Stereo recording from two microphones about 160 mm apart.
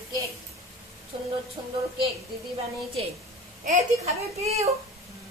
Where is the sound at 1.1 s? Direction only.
30° right (ahead or behind).